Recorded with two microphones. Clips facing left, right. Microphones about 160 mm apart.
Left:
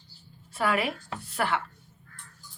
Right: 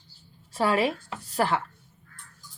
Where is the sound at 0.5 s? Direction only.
30° right (ahead or behind).